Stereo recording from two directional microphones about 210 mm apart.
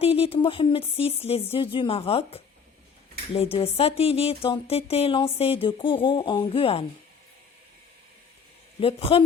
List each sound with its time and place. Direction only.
0.0 s speech: 30° left (ahead or behind)
8.8 s speech: 25° left (ahead or behind)